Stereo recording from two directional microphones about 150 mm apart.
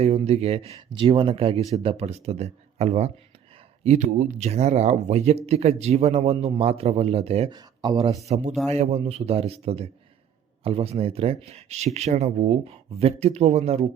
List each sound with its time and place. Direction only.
0.0 s speech: 45° right (ahead or behind)
7.5 s speech: 30° right (ahead or behind)
8.3 s speech: 50° right (ahead or behind)